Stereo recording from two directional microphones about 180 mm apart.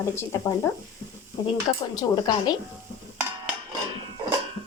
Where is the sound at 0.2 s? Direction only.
15° left (ahead or behind).